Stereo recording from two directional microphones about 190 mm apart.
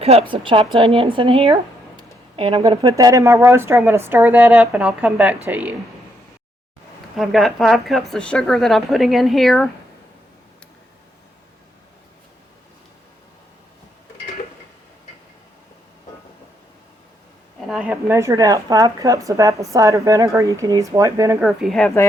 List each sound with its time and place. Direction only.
0.0 s speech: 30° right (ahead or behind); by 5.7 s 10° right (ahead or behind)
7.2 s speech: centre (ahead or behind)
17.7 s speech: 5° right (ahead or behind)
21.4 s speech: centre (ahead or behind)